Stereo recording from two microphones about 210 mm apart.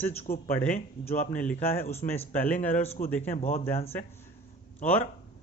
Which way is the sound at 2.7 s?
30° left (ahead or behind).